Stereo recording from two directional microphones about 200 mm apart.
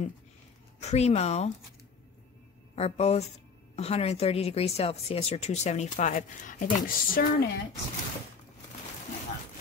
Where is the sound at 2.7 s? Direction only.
30° left (ahead or behind); by 7.4 s 50° left (ahead or behind).